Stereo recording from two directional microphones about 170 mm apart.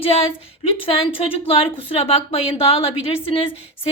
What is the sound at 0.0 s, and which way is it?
A woman's voice, 35° left (ahead or behind).